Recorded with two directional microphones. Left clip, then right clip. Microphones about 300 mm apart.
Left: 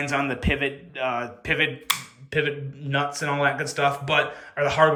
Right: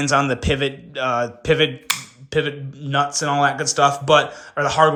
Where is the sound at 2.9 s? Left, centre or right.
Centre.